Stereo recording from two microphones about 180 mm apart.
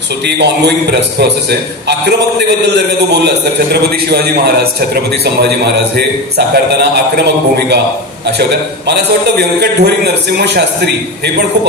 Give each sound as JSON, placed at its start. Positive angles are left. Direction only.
{"t": 0.4, "sound": "a man's voice", "side_deg": -70}
{"t": 4.9, "sound": "a man's voice", "side_deg": -60}